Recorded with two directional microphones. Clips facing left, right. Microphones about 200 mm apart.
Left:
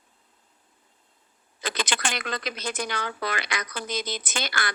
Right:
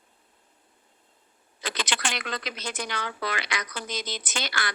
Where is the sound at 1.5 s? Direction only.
50° left (ahead or behind).